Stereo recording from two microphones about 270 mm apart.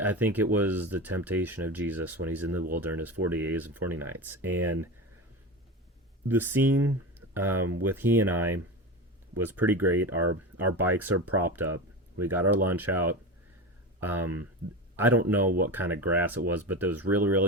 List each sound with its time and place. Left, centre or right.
0.0 s speech: centre
4.5 s speech: right
6.2 s speech: centre
9.4 s speech: centre
10.2 s speech: right
10.8 s speech: centre